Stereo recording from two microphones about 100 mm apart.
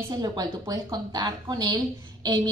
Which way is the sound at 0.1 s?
40° right (ahead or behind).